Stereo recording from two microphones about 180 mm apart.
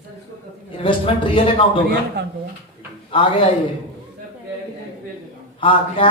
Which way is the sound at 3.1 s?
30° left (ahead or behind).